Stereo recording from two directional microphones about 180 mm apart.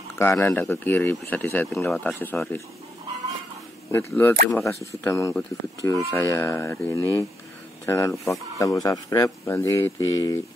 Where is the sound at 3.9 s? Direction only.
10° left (ahead or behind).